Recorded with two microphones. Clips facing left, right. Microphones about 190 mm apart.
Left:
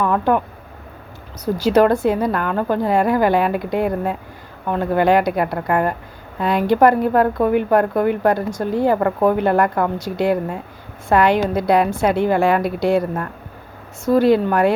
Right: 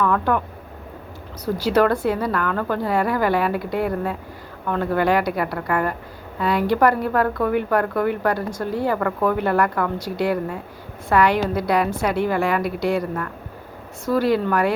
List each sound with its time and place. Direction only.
0.0 s speech: 20° left (ahead or behind)
1.6 s a woman's voice: 20° left (ahead or behind)
14.1 s a woman's voice: 20° left (ahead or behind)